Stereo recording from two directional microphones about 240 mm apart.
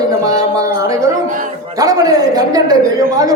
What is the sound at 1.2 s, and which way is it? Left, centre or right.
Speech, right.